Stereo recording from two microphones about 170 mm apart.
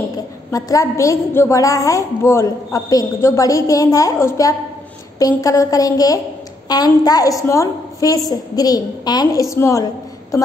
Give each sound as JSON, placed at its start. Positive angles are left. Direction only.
{"t": 0.5, "sound": "a woman's voice", "side_deg": 20}